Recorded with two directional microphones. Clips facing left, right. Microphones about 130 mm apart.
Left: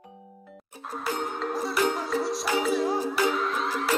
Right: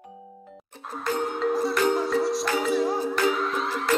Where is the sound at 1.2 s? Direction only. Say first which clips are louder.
Right 5 dB; centre (ahead or behind).